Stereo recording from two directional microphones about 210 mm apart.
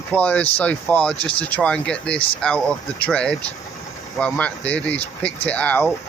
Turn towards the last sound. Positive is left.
turn(degrees=5)  # may be behind; listen again after turning